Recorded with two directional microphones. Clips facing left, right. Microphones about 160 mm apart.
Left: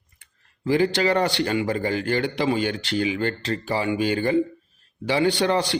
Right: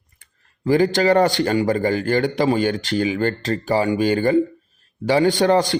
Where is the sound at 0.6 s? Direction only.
45° right (ahead or behind).